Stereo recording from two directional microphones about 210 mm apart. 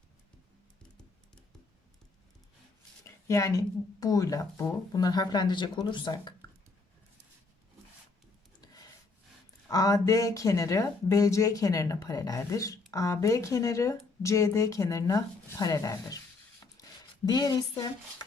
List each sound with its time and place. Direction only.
3.2 s speech: 15° left (ahead or behind)
8.6 s rub: 20° left (ahead or behind)
9.6 s speech: 15° left (ahead or behind)
17.2 s speech: 20° left (ahead or behind)